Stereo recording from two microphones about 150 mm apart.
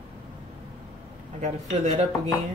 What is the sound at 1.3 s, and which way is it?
Speech, 45° right (ahead or behind).